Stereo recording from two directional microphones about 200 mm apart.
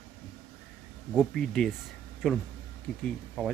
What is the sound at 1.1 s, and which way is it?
Speech, centre (ahead or behind).